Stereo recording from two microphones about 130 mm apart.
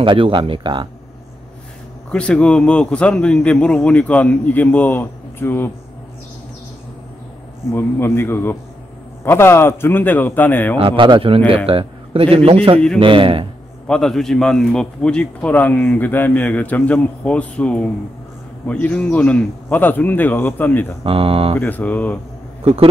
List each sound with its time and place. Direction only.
0.0 s speech: 40° right (ahead or behind)
2.0 s a man's voice: 10° left (ahead or behind)
7.7 s a man's voice: 15° left (ahead or behind)
10.8 s a man's voice: 40° right (ahead or behind)
13.8 s a man's voice: 5° left (ahead or behind)
21.0 s a man's voice: 45° right (ahead or behind)
21.5 s a man's voice: 15° left (ahead or behind)